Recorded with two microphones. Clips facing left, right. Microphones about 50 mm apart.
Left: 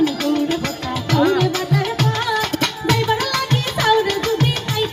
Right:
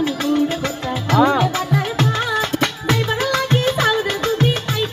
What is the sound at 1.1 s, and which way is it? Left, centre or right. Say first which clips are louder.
Music: right 1 dB; right.